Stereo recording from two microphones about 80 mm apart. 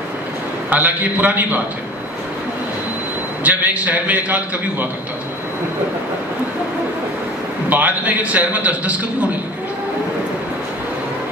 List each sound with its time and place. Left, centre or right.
0.7 s a man's voice: centre
3.4 s a man's voice: centre
7.7 s a man's voice: centre